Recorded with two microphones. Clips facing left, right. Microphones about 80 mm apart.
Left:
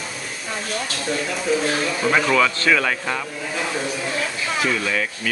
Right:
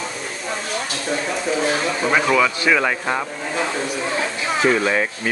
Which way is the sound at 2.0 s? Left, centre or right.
Centre.